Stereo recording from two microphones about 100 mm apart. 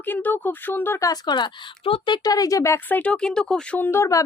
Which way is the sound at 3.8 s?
25° left (ahead or behind).